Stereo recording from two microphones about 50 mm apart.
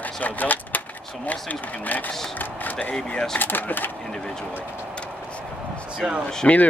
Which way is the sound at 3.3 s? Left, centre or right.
Left.